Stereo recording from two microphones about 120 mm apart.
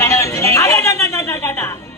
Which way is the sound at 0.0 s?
25° left (ahead or behind).